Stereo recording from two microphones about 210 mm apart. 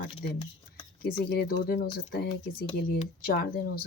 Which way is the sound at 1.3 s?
45° left (ahead or behind).